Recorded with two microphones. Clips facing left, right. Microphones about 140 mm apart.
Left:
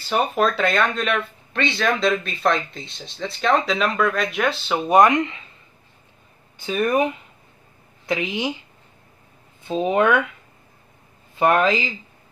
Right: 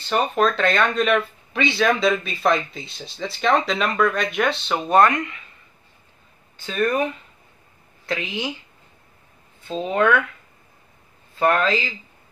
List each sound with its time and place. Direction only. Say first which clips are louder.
0.1 s speech: even; 5° left (ahead or behind)
4.9 s speech: left 2 dB; 20° left (ahead or behind)
6.6 s speech: left 2 dB; 15° left (ahead or behind)
9.7 s speech: left 1 dB; 15° left (ahead or behind)
11.3 s speech: left 2 dB; 15° left (ahead or behind)